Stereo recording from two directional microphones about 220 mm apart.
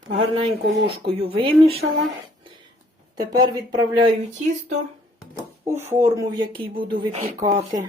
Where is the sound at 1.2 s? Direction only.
25° right (ahead or behind).